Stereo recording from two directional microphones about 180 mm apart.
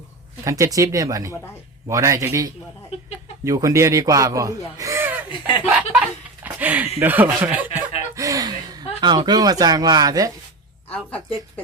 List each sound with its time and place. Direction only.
0.4 s speech: 20° right (ahead or behind)
5.3 s snicker: 25° left (ahead or behind)
5.6 s a sound: 10° right (ahead or behind)